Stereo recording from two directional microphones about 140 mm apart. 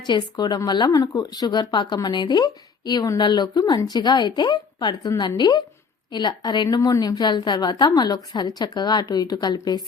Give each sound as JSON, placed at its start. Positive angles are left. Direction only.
{"t": 0.0, "sound": "speech", "side_deg": 30}